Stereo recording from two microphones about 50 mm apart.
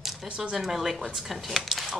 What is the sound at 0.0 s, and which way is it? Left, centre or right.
Speech, centre.